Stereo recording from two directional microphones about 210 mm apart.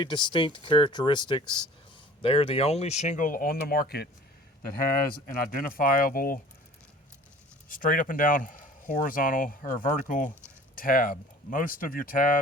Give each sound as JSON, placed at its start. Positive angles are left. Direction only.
{"t": 0.0, "sound": "speech", "side_deg": 25}
{"t": 5.2, "sound": "speech", "side_deg": 45}
{"t": 7.7, "sound": "speech", "side_deg": 40}